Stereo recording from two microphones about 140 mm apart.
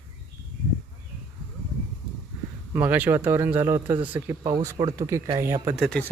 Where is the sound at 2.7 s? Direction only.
10° right (ahead or behind).